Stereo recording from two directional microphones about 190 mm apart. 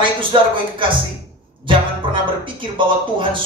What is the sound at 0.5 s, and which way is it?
Speech, 25° right (ahead or behind).